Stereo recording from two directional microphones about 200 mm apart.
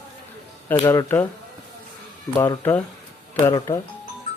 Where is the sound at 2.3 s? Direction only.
15° left (ahead or behind).